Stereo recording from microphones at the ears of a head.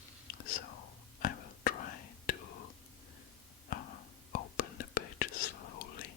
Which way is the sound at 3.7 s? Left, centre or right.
Left.